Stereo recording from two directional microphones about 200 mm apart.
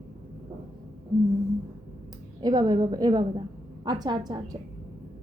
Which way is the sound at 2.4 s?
20° right (ahead or behind).